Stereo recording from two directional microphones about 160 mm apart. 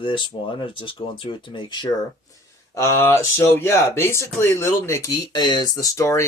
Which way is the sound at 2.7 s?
15° left (ahead or behind).